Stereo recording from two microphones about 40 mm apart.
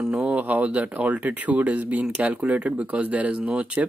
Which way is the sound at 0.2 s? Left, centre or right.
Right.